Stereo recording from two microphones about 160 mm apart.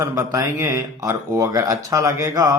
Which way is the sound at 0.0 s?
20° right (ahead or behind).